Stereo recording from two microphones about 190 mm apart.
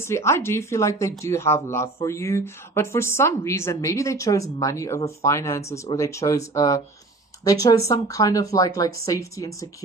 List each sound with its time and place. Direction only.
0.0 s speech: 15° left (ahead or behind)